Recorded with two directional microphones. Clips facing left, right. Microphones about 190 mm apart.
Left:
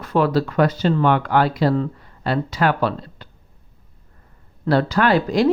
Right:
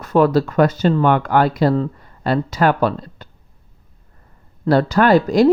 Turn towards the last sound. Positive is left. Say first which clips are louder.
# right 4 dB
turn(degrees=-40)  # may be behind; listen again after turning